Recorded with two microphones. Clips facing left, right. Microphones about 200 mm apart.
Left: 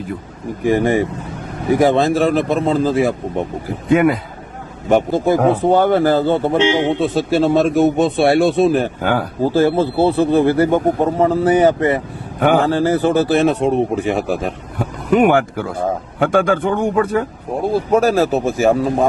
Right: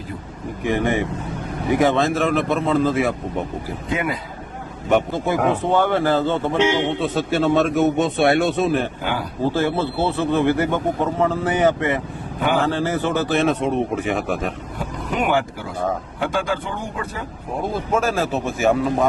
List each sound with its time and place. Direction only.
0.7 s speech: 35° left (ahead or behind)
3.9 s speech: 55° left (ahead or behind)
4.9 s speech: 35° left (ahead or behind)
9.0 s speech: 45° left (ahead or behind)
12.4 s speech: 55° left (ahead or behind)
12.6 s speech: 35° left (ahead or behind)
15.1 s a man's voice: 55° left (ahead or behind)
17.7 s speech: 35° left (ahead or behind)